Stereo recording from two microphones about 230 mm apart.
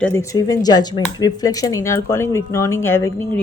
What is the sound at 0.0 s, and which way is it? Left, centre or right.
Speech, centre.